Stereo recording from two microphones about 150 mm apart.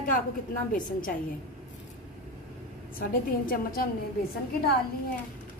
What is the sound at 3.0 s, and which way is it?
Speech, 80° left.